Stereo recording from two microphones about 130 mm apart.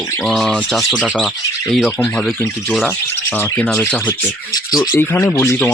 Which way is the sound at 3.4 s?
15° left (ahead or behind).